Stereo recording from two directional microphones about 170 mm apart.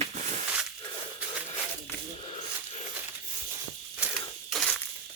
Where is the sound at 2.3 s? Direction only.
40° left (ahead or behind).